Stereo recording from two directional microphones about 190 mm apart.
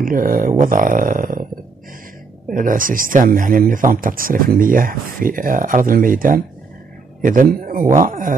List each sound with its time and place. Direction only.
0.0 s speech: 45° right (ahead or behind)
2.5 s a man's voice: 45° right (ahead or behind)